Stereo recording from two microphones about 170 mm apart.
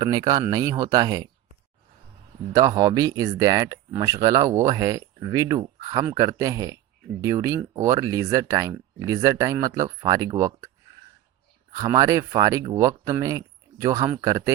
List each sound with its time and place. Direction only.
0.0 s speech: 25° right (ahead or behind)
2.5 s speech: 20° right (ahead or behind)
11.7 s speech: 20° right (ahead or behind)